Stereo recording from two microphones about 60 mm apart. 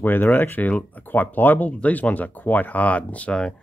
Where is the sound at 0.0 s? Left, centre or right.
Left.